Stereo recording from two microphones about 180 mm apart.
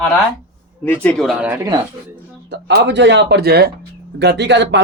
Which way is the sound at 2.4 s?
70° right (ahead or behind).